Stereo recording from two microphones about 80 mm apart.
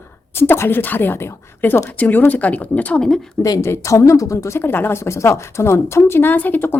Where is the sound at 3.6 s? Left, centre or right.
Left.